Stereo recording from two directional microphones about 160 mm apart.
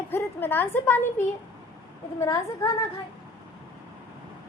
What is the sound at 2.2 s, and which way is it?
Speech, 20° left (ahead or behind).